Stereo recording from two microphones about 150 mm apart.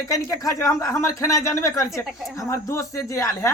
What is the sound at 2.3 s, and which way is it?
Speech, 20° left (ahead or behind).